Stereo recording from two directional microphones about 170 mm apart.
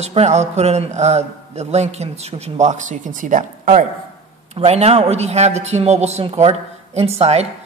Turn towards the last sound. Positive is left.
turn(degrees=-40)  # may be behind; listen again after turning